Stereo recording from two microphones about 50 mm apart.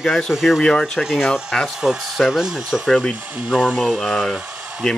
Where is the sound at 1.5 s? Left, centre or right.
Centre.